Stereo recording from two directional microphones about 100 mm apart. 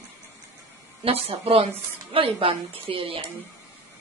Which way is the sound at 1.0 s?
75° right (ahead or behind).